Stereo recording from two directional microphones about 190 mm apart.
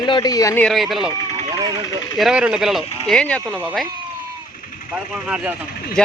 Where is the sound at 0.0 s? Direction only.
20° left (ahead or behind).